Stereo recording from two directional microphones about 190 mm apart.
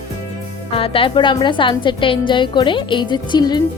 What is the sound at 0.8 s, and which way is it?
A woman's voice, 25° left (ahead or behind).